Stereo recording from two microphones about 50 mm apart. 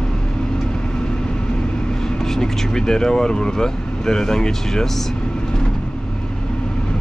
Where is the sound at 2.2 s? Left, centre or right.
Centre.